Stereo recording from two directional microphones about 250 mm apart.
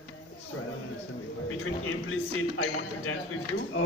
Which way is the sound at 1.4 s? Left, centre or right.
Left.